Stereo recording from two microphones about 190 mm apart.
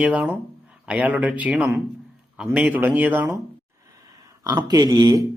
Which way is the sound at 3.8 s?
15° right (ahead or behind).